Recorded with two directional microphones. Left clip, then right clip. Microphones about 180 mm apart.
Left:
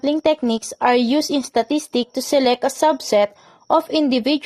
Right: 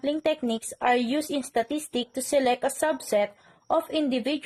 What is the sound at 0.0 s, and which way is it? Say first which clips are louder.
Speech: left 8 dB; 35° left (ahead or behind).